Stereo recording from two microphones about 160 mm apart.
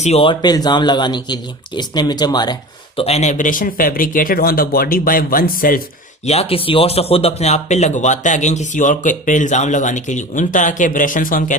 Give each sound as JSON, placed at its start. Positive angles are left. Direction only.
{"t": 0.0, "sound": "speech", "side_deg": 40}
{"t": 6.2, "sound": "speech", "side_deg": 40}